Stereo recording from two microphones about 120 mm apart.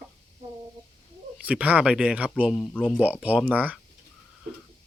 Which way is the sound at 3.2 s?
10° right (ahead or behind).